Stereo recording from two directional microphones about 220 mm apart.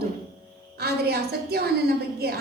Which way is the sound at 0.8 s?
45° right (ahead or behind).